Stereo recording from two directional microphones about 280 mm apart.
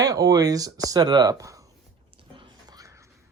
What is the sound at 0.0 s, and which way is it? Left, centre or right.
Speech, centre.